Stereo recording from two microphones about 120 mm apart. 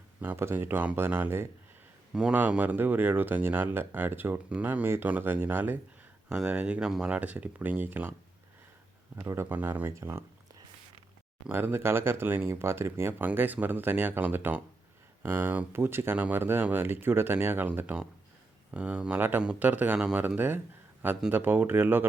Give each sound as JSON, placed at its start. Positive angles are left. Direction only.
{"t": 0.2, "sound": "speech", "side_deg": -20}
{"t": 9.1, "sound": "speech", "side_deg": -20}